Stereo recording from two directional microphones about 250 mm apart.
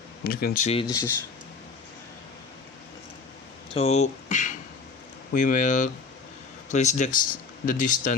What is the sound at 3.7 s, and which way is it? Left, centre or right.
Speech, left.